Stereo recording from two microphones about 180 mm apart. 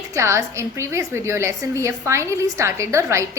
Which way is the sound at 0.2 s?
15° right (ahead or behind).